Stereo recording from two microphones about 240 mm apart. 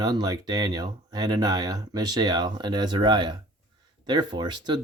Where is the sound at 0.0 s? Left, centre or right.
Centre.